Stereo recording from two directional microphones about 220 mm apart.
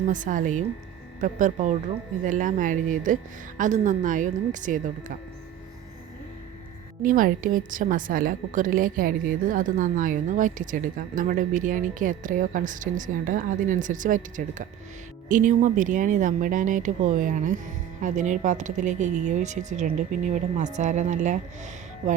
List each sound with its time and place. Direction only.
0.1 s a woman's voice: 35° right (ahead or behind)
7.0 s a woman's voice: 40° right (ahead or behind)